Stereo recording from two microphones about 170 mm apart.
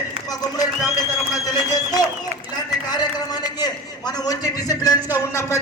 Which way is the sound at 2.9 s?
25° left (ahead or behind).